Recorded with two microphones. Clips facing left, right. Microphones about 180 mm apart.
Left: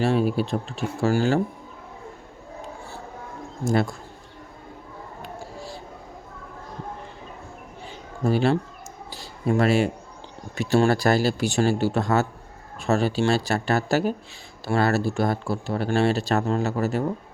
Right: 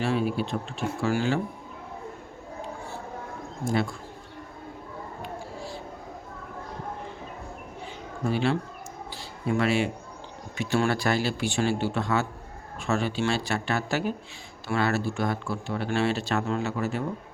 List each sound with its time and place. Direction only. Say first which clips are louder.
0.0 s speech: left 4 dB; 40° left (ahead or behind)
3.6 s speech: left 4 dB; 40° left (ahead or behind)
8.2 s speech: left 5 dB; 40° left (ahead or behind)